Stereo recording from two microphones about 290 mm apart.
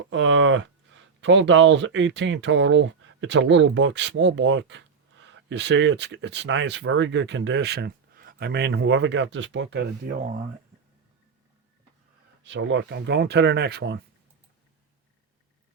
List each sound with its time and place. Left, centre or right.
0.1 s speech: right
12.4 s speech: right